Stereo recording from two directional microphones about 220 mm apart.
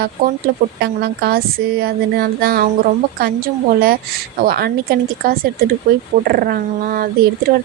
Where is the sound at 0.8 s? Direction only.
45° right (ahead or behind).